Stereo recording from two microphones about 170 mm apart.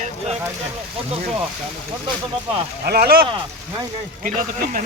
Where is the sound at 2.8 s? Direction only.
65° right (ahead or behind).